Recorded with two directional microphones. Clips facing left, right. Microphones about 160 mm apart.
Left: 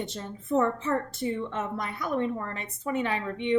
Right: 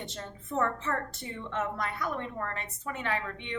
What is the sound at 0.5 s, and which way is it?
A woman's voice, 20° left (ahead or behind).